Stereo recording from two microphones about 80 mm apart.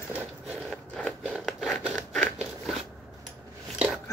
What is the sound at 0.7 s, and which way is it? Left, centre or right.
Scrape, centre.